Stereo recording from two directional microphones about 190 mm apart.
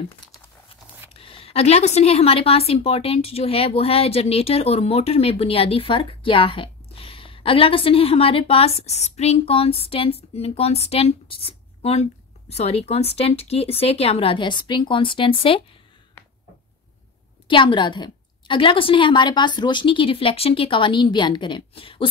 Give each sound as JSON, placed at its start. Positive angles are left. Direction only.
{"t": 1.1, "sound": "a woman's voice", "side_deg": 30}
{"t": 17.5, "sound": "a woman's voice", "side_deg": 25}